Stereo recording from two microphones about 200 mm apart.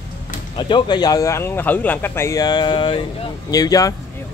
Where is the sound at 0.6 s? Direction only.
25° left (ahead or behind).